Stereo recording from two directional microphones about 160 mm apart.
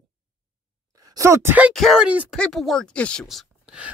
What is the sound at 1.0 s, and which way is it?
Speech, 20° right (ahead or behind).